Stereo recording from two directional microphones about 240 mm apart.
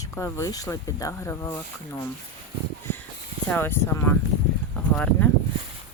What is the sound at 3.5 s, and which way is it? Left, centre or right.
Speech, centre.